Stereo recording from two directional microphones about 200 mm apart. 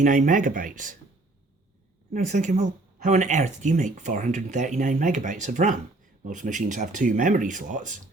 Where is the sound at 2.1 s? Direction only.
35° right (ahead or behind).